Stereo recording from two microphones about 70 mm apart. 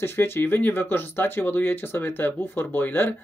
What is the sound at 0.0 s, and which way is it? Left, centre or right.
Speech, left.